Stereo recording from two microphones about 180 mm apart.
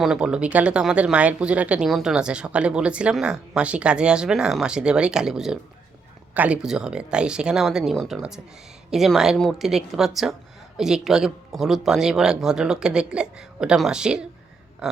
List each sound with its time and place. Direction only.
0.0 s speech: 5° right (ahead or behind)